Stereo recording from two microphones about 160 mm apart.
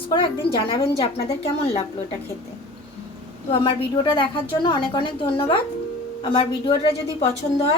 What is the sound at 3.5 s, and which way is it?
A woman's voice, 30° left (ahead or behind).